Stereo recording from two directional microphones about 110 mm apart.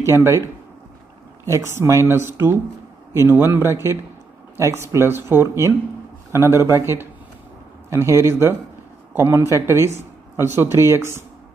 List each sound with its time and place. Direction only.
0.0 s speech: 25° right (ahead or behind)
1.4 s speech: 25° right (ahead or behind)